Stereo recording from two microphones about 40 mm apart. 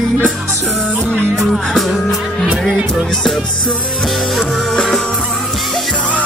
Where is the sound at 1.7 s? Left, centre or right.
Centre.